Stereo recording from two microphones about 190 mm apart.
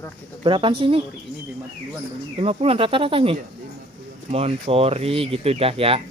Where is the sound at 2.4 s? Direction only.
30° right (ahead or behind).